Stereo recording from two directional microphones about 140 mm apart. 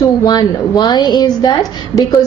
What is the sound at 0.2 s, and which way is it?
A woman's voice, 30° left (ahead or behind).